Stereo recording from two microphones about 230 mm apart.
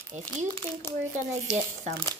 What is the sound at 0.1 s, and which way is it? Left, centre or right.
Speech, right.